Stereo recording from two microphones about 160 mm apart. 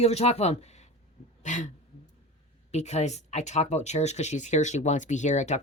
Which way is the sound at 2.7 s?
45° left (ahead or behind).